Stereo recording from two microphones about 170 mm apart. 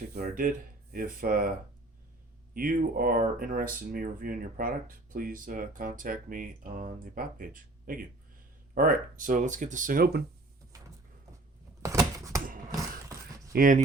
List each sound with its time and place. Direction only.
0.1 s speech: 60° right (ahead or behind)
10.7 s a sound: 20° right (ahead or behind)
13.5 s speech: 55° right (ahead or behind)